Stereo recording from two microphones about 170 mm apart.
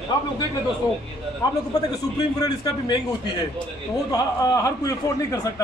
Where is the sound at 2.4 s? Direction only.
20° left (ahead or behind).